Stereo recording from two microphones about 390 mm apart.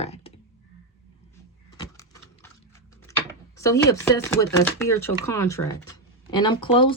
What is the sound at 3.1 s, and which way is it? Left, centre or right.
Drawer open or close, centre.